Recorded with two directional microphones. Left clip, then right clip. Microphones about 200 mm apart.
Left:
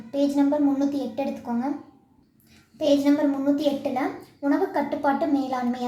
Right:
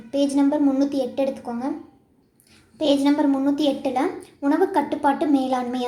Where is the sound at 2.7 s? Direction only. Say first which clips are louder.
Right 1 dB; 30° right (ahead or behind).